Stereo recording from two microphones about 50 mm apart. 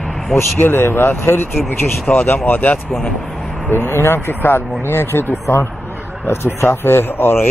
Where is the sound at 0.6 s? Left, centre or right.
Left.